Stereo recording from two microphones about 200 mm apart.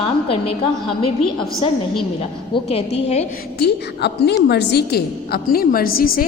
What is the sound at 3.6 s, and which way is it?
A woman's voice, 55° left (ahead or behind).